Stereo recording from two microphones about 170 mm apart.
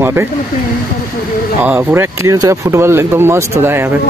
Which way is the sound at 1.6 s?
15° right (ahead or behind).